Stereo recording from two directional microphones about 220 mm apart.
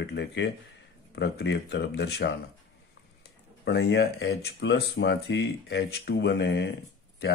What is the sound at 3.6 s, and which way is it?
Speech, 50° left (ahead or behind).